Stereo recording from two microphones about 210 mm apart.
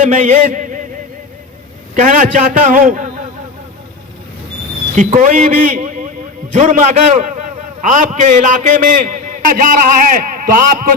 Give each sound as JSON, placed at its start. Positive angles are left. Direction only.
{"t": 0.0, "sound": "chant", "side_deg": -35}
{"t": 2.0, "sound": "a man's voice", "side_deg": -40}
{"t": 4.9, "sound": "a man's voice", "side_deg": -40}